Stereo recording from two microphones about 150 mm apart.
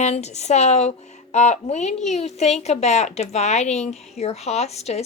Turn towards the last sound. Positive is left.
turn(degrees=45)  # may be behind; listen again after turning